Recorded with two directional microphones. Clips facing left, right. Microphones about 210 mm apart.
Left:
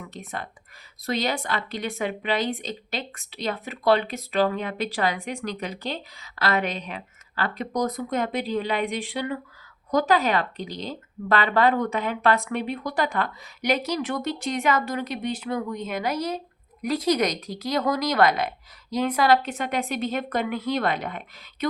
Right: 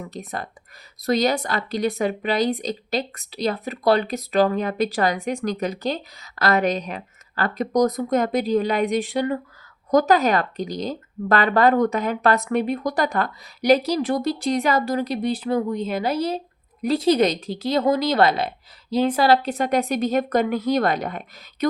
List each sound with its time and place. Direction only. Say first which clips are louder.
0.0 s a woman's voice: right 4 dB; 40° right (ahead or behind)